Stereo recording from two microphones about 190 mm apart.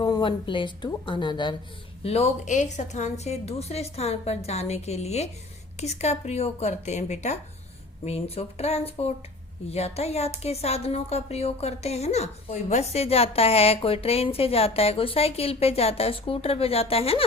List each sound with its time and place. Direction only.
0.0 s speech: 25° left (ahead or behind)